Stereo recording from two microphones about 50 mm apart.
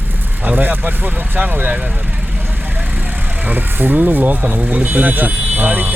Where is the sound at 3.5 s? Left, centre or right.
Right.